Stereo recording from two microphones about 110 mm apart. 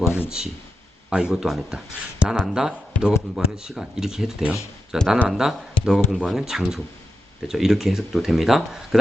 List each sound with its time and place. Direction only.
0.0 s speech: 20° left (ahead or behind)
1.1 s speech: 5° right (ahead or behind)